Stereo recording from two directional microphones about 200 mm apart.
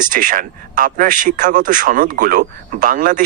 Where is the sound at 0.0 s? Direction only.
40° right (ahead or behind).